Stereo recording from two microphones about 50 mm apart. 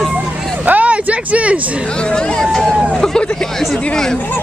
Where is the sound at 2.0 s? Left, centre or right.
Centre.